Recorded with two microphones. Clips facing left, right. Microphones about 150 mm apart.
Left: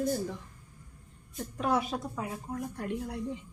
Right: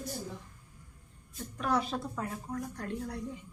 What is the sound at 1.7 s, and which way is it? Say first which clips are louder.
A woman's voice: left 1 dB; 10° left (ahead or behind).